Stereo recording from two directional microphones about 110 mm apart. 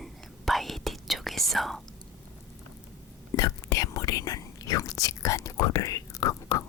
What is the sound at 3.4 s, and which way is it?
Whispering, 30° left (ahead or behind).